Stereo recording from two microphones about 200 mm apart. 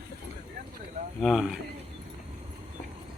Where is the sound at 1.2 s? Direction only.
Centre (ahead or behind).